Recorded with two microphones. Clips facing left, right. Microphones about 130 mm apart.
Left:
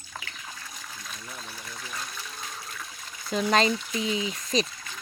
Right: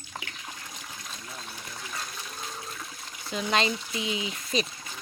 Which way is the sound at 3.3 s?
40° left (ahead or behind).